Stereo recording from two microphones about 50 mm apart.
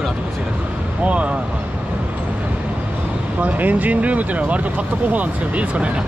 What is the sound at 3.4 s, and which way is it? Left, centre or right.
Speech, right.